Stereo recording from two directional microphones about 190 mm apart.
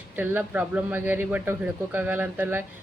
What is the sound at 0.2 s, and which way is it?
Speech, 10° right (ahead or behind).